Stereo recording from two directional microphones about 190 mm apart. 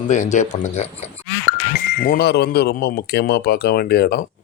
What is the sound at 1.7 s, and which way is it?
Speech, 55° left (ahead or behind).